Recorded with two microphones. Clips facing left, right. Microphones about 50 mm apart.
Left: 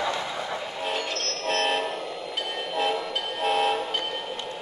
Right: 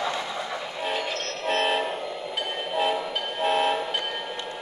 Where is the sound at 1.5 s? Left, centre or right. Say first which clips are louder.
Right 1 dB; centre.